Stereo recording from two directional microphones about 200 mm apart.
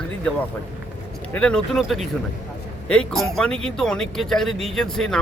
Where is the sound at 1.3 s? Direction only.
5° left (ahead or behind).